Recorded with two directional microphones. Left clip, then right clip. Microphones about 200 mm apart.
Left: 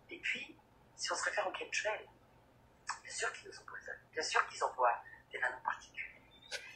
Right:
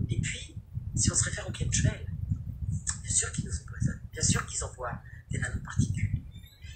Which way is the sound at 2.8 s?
35° right (ahead or behind).